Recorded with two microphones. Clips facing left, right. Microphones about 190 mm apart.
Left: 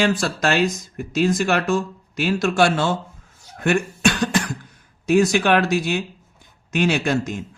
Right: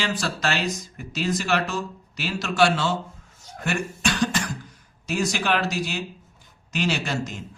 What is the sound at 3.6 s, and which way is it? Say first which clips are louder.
Cough: left 7 dB; 55° left (ahead or behind).